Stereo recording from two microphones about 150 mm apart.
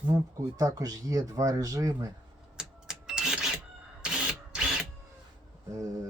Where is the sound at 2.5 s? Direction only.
5° right (ahead or behind).